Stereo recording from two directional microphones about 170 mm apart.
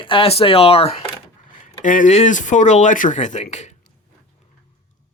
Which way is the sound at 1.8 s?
50° left (ahead or behind).